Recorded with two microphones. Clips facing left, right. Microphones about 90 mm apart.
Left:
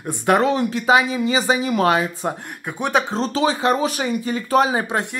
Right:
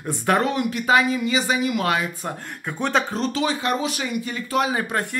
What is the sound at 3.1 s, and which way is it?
Speech, 30° left (ahead or behind).